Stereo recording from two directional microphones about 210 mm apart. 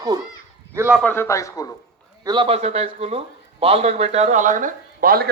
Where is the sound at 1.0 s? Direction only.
10° left (ahead or behind).